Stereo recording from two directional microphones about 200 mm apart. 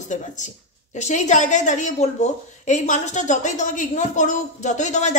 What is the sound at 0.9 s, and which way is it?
A woman's voice, 35° left (ahead or behind).